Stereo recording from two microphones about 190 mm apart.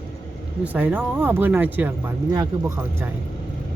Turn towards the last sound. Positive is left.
turn(degrees=-15)  # may be behind; listen again after turning